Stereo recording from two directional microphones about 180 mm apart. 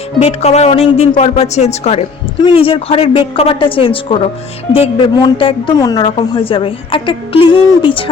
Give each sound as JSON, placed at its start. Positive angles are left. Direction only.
{"t": 0.2, "sound": "a woman's voice", "side_deg": 35}